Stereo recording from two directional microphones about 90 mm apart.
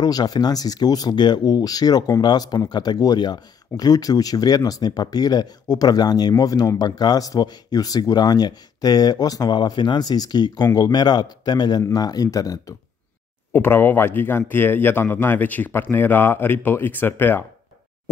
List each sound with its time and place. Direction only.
0.0 s speech: 45° left (ahead or behind)
13.5 s speech: 25° left (ahead or behind)